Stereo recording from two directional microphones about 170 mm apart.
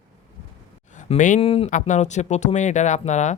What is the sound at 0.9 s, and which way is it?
Speech, 50° left (ahead or behind).